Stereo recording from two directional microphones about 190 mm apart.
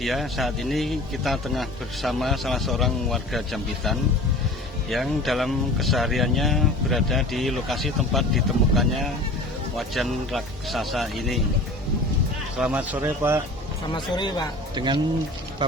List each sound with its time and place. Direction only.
0.0 s speech: centre (ahead or behind)
12.5 s speech: 5° right (ahead or behind)
13.9 s speech: 20° left (ahead or behind)
14.8 s speech: 25° right (ahead or behind)